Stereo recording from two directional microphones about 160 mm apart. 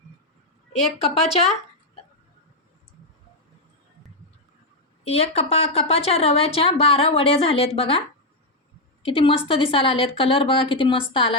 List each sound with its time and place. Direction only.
1.0 s a woman's voice: 40° left (ahead or behind)
5.0 s a woman's voice: 40° left (ahead or behind)
9.0 s a woman's voice: 35° left (ahead or behind)